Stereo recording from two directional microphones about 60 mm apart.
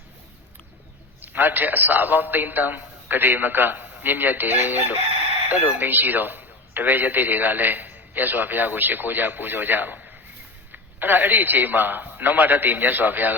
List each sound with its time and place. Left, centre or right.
1.2 s speech: right